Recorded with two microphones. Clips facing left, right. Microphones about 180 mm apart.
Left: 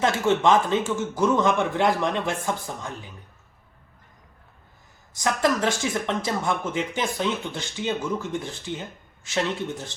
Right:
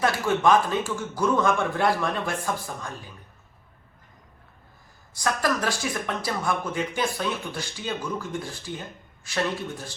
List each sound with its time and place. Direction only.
0.0 s speech: 20° left (ahead or behind)
5.1 s speech: 20° left (ahead or behind)